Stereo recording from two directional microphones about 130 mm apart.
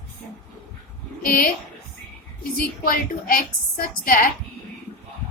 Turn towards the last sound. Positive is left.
turn(degrees=90)